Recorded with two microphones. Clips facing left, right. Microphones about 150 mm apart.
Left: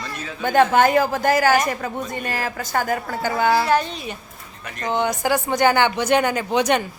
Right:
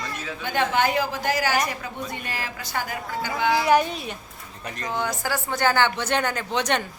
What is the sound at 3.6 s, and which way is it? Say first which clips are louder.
Speech: right 1 dB; 15° right (ahead or behind).